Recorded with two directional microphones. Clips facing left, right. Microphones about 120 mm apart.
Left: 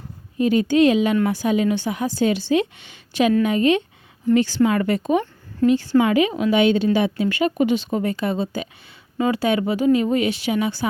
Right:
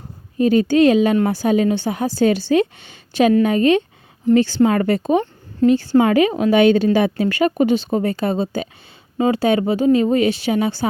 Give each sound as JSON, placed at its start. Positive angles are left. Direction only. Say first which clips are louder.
{"t": 0.3, "sound": "speech", "louder": "right 3 dB", "side_deg": -35}